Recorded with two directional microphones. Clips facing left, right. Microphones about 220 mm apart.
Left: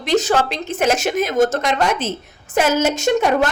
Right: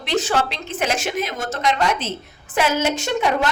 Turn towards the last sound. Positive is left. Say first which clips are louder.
# left 4 dB
turn(degrees=45)  # may be behind; listen again after turning